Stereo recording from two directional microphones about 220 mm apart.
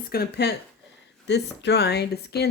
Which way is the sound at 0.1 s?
45° left (ahead or behind).